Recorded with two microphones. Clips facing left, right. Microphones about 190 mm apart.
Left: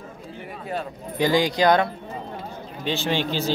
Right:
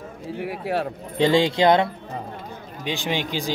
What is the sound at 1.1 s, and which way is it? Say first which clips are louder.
Speech: right 2 dB; 25° right (ahead or behind).